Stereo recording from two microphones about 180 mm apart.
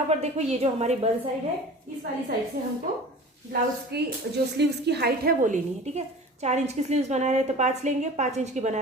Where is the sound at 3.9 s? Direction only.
65° right (ahead or behind).